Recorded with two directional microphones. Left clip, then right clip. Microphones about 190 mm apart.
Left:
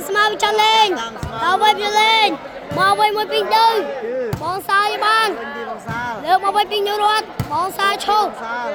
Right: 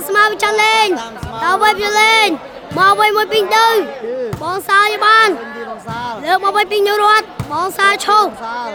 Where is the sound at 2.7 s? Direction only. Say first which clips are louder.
Right 4 dB; 30° right (ahead or behind).